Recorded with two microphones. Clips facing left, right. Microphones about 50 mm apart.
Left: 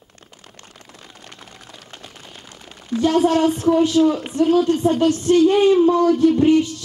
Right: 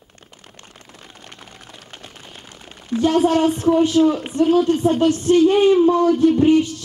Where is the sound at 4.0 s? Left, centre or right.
Right.